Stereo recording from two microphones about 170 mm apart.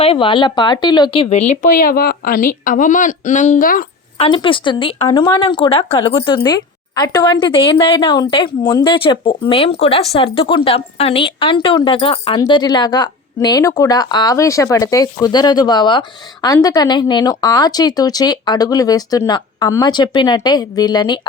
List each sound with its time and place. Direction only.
0.0 s speech: 30° left (ahead or behind); by 3.8 s 55° left (ahead or behind)
4.2 s a woman's voice: 30° left (ahead or behind)